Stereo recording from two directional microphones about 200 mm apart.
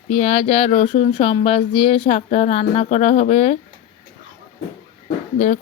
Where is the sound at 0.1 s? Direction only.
30° left (ahead or behind).